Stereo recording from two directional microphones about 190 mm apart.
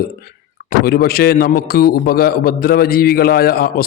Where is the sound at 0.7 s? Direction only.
55° left (ahead or behind).